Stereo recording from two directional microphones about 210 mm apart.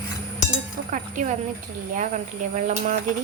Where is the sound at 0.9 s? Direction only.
35° right (ahead or behind).